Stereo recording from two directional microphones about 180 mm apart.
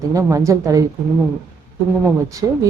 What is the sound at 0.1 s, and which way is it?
Speech, 20° right (ahead or behind).